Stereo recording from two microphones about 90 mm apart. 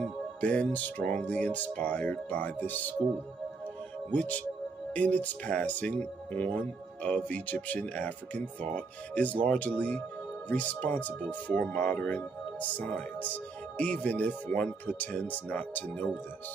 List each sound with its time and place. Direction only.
0.0 s speech: 15° left (ahead or behind)
4.1 s speech: 15° left (ahead or behind)